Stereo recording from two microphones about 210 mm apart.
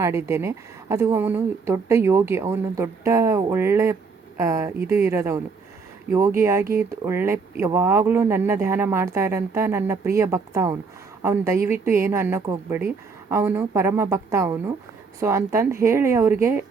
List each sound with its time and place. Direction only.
0.0 s speech: 15° right (ahead or behind)